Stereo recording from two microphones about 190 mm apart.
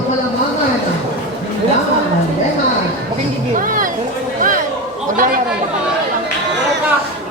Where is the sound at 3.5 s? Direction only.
45° right (ahead or behind).